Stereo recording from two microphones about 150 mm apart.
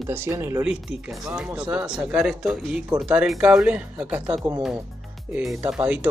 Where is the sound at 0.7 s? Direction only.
5° right (ahead or behind).